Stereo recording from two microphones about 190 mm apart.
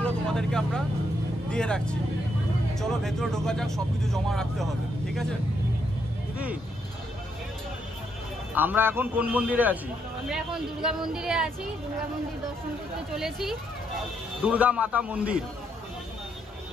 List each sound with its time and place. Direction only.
0.0 s vehicle: 5° left (ahead or behind)
1.5 s speech: 5° left (ahead or behind)
6.3 s speech: 5° right (ahead or behind)
8.5 s a man's voice: 10° right (ahead or behind)
13.1 s a man's voice: centre (ahead or behind)